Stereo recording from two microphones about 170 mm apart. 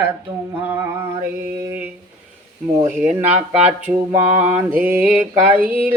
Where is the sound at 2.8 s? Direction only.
10° right (ahead or behind).